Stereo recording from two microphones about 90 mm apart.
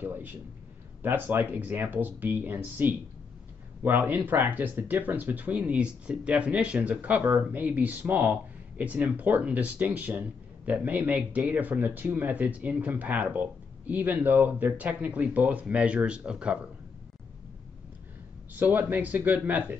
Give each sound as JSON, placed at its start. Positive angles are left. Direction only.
{"t": 0.0, "sound": "speech", "side_deg": -20}
{"t": 18.5, "sound": "speech", "side_deg": -20}